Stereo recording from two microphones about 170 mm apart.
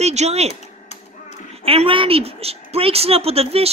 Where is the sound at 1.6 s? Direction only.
35° right (ahead or behind).